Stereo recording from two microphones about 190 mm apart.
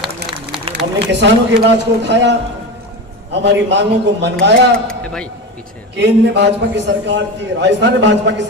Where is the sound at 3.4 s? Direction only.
65° right (ahead or behind).